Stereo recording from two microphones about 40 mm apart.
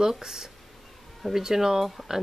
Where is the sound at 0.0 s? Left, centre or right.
Centre.